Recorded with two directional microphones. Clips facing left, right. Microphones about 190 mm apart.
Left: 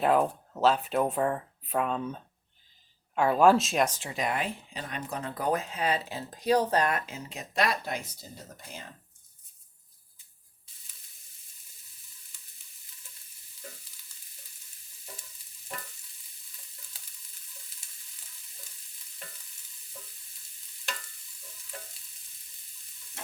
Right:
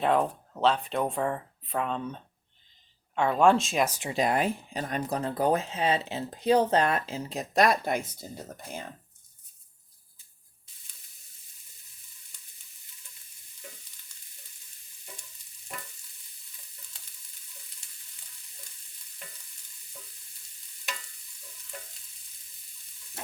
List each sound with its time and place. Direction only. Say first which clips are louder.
0.0 s speech: left 1 dB; 5° left (ahead or behind)
4.1 s speech: right 5 dB; 35° right (ahead or behind); by 8.1 s 50° right (ahead or behind)